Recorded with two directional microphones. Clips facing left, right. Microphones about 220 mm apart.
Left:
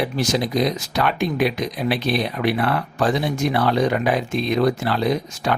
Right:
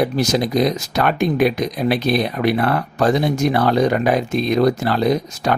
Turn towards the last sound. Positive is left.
turn(degrees=-40)  # may be behind; listen again after turning